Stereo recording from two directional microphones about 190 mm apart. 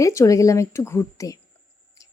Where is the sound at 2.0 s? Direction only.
20° left (ahead or behind).